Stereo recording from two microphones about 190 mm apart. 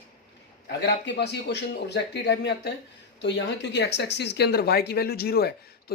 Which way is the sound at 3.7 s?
65° left (ahead or behind).